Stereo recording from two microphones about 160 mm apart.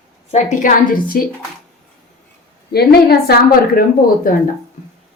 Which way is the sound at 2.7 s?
80° left.